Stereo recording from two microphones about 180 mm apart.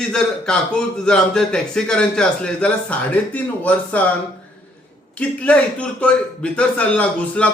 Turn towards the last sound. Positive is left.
turn(degrees=10)  # may be behind; listen again after turning